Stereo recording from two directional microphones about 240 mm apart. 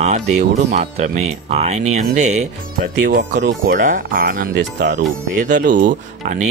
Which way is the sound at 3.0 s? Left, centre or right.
Right.